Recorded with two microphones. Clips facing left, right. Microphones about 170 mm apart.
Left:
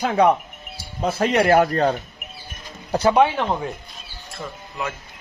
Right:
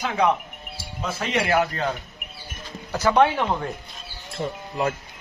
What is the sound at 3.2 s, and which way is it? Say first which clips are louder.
Speech: left 1 dB; 5° left (ahead or behind).